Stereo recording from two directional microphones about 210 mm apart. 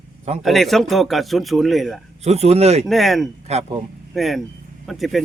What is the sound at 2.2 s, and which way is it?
Speech, 30° right (ahead or behind).